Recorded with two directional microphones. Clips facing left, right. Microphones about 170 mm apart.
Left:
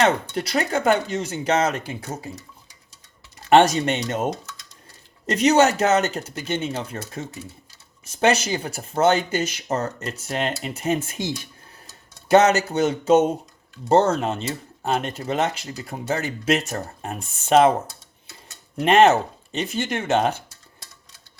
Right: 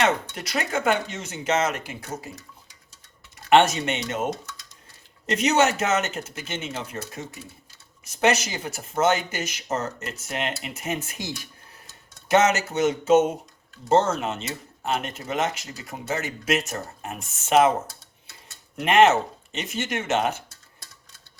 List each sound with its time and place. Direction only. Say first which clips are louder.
0.0 s speech: left 3 dB; 35° left (ahead or behind)
3.5 s speech: left 3 dB; 35° left (ahead or behind)
18.8 s speech: left 2 dB; 35° left (ahead or behind)